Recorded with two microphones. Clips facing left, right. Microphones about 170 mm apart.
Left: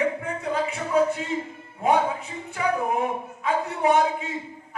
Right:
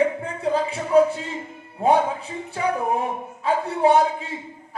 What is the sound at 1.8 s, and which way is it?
Speech, 30° right (ahead or behind).